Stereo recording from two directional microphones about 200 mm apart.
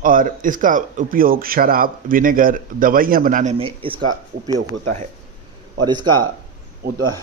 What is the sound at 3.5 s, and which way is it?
Speech, 25° right (ahead or behind).